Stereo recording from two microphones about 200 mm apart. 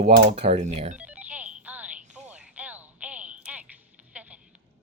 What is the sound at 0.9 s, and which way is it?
Music, 5° right (ahead or behind).